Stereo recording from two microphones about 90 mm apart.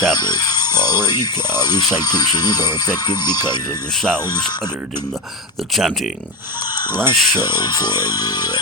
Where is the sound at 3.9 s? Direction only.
5° left (ahead or behind).